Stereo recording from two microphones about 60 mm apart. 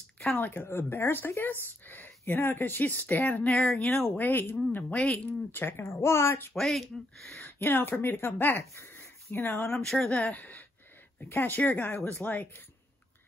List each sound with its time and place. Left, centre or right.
0.4 s speech: left
3.8 s speech: centre
4.2 s speech: left
4.8 s speech: left
5.5 s speech: left
6.5 s speech: centre
7.3 s speech: left
8.5 s speech: left
9.7 s speech: centre
10.0 s speech: left